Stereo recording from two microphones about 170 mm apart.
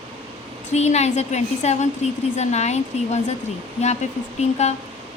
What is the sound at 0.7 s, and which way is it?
A woman's voice, 40° left (ahead or behind).